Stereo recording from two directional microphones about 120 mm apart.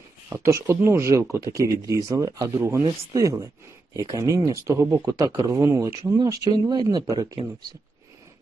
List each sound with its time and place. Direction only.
0.3 s speech: 25° right (ahead or behind)